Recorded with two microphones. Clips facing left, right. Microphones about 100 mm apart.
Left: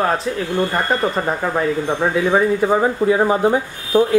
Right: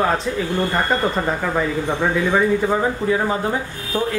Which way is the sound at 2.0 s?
25° left (ahead or behind).